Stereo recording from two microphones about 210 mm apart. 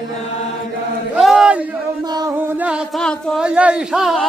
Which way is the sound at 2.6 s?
5° right (ahead or behind).